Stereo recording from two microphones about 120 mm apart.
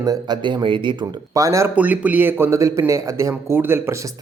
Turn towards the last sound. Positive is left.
turn(degrees=-20)  # may be behind; listen again after turning